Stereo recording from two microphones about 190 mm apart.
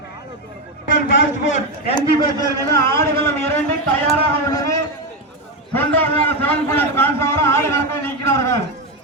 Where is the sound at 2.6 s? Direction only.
15° left (ahead or behind).